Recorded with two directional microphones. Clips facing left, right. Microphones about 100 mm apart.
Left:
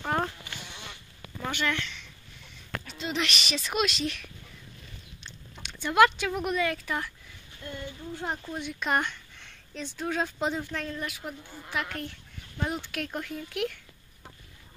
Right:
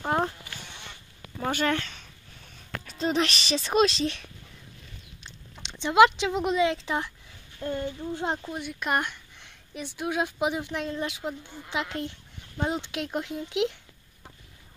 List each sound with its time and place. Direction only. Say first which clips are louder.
0.0 s insect: right 3 dB; 20° right (ahead or behind)
1.4 s a sound: right 4 dB; 40° right (ahead or behind)
2.9 s speech: right 6 dB; 40° right (ahead or behind)
5.6 s speech: right 3 dB; 20° right (ahead or behind)
7.6 s speech: right 9 dB; 35° right (ahead or behind)
8.1 s speech: right 3 dB; 25° right (ahead or behind)
8.5 s speech: right 1 dB; 5° right (ahead or behind)